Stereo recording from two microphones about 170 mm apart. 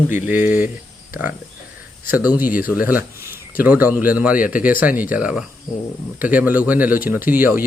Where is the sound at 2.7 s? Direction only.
10° right (ahead or behind).